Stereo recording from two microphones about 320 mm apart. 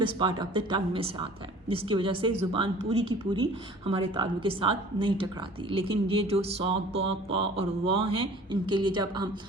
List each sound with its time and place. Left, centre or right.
0.0 s a woman's voice: centre